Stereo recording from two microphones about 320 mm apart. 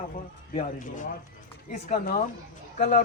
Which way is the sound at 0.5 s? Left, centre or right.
Left.